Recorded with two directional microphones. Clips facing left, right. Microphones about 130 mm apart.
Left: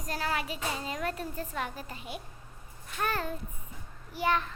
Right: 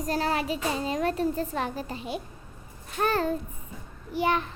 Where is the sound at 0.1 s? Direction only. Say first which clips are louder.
Right 5 dB; 30° right (ahead or behind).